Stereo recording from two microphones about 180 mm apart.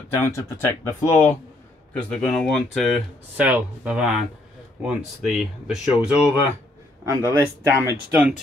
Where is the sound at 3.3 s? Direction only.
10° right (ahead or behind).